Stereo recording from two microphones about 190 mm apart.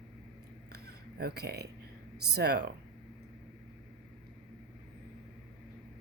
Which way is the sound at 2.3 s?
60° right (ahead or behind).